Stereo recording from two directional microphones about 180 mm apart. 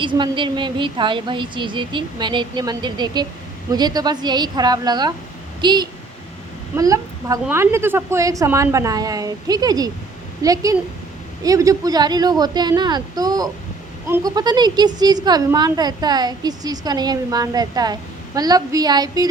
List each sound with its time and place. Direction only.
0.0 s a woman's voice: 25° right (ahead or behind)